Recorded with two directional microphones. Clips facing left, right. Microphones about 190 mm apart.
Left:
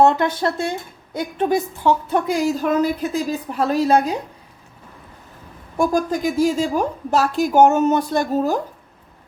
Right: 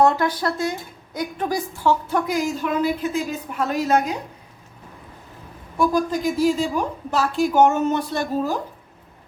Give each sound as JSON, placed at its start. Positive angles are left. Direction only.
{"t": 0.0, "sound": "a woman's voice", "side_deg": 25}
{"t": 5.7, "sound": "a woman's voice", "side_deg": 45}